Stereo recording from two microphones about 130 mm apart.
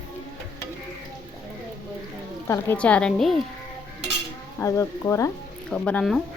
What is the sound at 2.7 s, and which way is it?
Speech, 10° left (ahead or behind).